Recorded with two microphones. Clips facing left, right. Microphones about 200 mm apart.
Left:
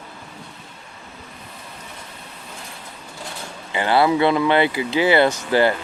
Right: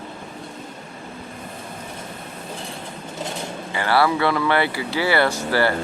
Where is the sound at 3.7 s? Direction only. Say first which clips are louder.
Left 2 dB; 20° left (ahead or behind).